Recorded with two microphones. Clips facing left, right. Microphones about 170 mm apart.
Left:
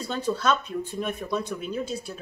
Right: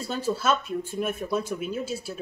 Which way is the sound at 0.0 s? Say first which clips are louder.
Left 1 dB; 5° right (ahead or behind).